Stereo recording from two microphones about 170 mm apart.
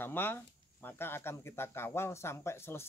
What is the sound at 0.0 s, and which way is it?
Speech, 10° left (ahead or behind).